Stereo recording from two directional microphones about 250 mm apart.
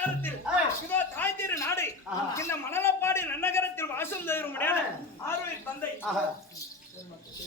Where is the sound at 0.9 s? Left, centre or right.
Centre.